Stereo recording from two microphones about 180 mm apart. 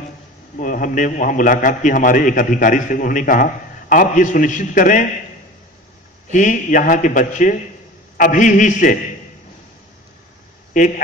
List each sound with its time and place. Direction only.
0.6 s a man's voice: 45° left (ahead or behind)
6.3 s a man's voice: 45° left (ahead or behind)